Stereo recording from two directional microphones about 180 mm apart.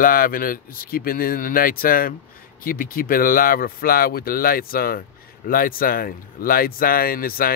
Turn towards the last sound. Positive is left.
turn(degrees=55)  # may be behind; listen again after turning